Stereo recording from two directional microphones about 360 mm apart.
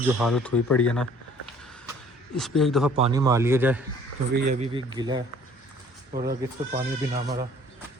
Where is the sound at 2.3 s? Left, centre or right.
Centre.